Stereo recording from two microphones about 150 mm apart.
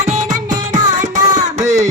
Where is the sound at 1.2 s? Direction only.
25° right (ahead or behind).